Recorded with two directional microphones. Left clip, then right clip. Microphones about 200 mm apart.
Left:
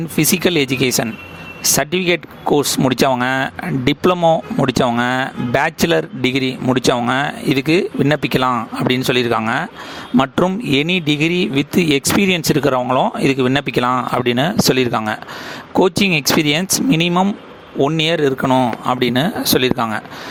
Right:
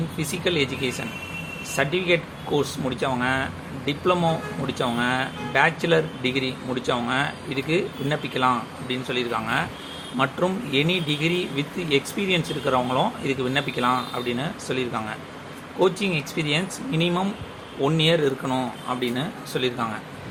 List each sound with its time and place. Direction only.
0.2 s speech: 55° left (ahead or behind)